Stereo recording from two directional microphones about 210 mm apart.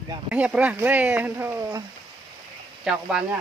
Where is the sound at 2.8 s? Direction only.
Centre (ahead or behind).